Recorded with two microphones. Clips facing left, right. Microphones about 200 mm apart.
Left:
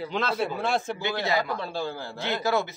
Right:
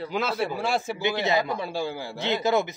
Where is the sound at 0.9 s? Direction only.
20° right (ahead or behind).